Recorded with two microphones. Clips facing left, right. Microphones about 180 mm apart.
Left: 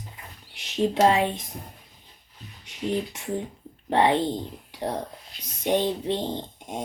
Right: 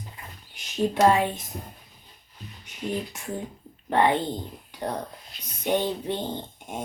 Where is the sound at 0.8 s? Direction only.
25° left (ahead or behind).